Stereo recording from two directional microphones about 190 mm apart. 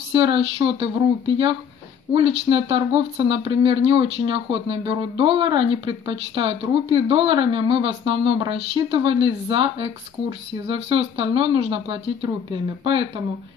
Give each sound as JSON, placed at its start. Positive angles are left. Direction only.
{"t": 0.1, "sound": "speech", "side_deg": -25}